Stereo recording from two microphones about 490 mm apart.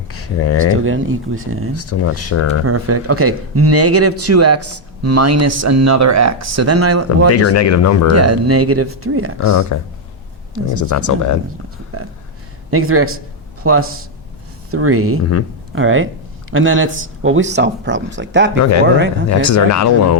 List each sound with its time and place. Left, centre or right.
0.1 s a sound: left
0.7 s a man's voice: right
1.7 s speech: left
2.6 s a man's voice: right
7.3 s speech: left
8.1 s a man's voice: right
9.4 s speech: left
10.8 s speech: left
12.7 s a man's voice: right
15.2 s speech: left
15.7 s a man's voice: right
19.3 s speech: left